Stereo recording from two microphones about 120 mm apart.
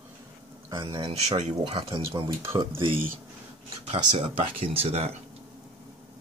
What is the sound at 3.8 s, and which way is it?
Speech, 50° right (ahead or behind).